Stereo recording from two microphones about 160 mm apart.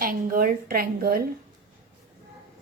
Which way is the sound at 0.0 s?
65° right (ahead or behind).